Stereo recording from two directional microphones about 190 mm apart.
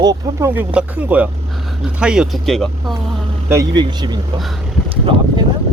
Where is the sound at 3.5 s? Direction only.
25° right (ahead or behind).